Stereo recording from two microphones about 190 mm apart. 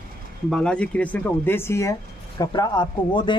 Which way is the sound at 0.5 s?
5° left (ahead or behind).